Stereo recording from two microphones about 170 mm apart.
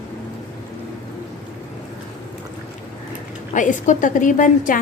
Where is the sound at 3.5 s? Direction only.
45° left (ahead or behind).